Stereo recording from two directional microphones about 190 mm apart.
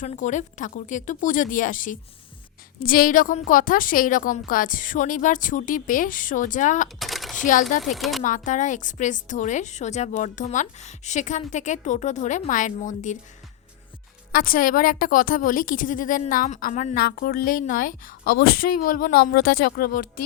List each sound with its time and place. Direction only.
0.0 s a woman's voice: 40° left (ahead or behind)
6.8 s a sound: centre (ahead or behind)
7.9 s speech: centre (ahead or behind)
8.2 s a woman's voice: 40° left (ahead or behind)
14.3 s a woman's voice: 50° left (ahead or behind)